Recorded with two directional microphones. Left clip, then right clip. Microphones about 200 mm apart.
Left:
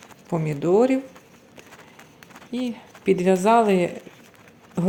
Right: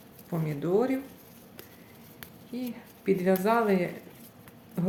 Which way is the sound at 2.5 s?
40° left (ahead or behind).